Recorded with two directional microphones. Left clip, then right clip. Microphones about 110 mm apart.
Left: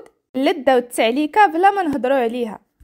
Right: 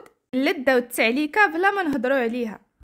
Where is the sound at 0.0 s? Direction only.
10° left (ahead or behind).